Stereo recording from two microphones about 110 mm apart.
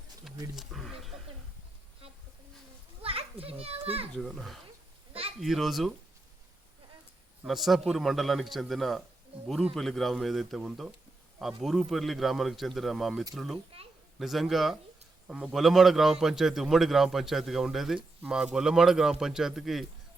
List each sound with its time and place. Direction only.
0.5 s speech: centre (ahead or behind)
3.0 s a child's voice: 60° right (ahead or behind)
4.1 s speech: 5° left (ahead or behind)
7.4 s speech: centre (ahead or behind)